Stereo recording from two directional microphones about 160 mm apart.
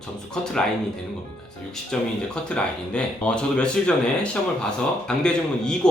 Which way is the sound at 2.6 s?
5° left (ahead or behind).